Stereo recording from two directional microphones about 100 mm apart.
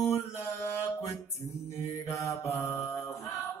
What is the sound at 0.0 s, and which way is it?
Mantra, 30° left (ahead or behind).